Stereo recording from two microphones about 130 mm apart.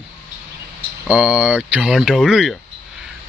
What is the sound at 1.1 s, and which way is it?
Speech, 10° right (ahead or behind).